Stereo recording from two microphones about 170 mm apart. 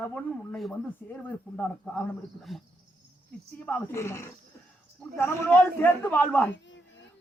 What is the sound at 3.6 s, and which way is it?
Speech, 15° left (ahead or behind).